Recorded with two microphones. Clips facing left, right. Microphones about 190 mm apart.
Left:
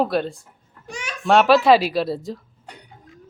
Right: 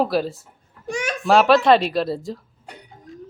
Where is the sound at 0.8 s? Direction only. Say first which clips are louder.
Right 8 dB; 50° right (ahead or behind).